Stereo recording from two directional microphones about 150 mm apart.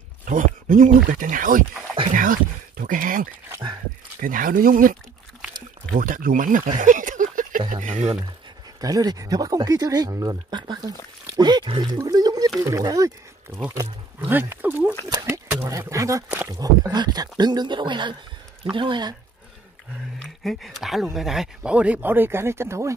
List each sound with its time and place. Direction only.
0.2 s speech: 60° right (ahead or behind)
6.8 s a sound: 60° right (ahead or behind)
7.7 s speech: 55° right (ahead or behind)
8.8 s speech: 25° right (ahead or behind)
14.2 s speech: 15° right (ahead or behind); by 19.1 s 30° right (ahead or behind)
20.4 s speech: centre (ahead or behind); by 22.9 s 20° right (ahead or behind)